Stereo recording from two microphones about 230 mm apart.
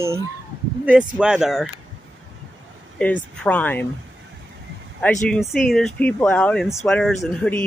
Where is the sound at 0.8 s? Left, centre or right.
Centre.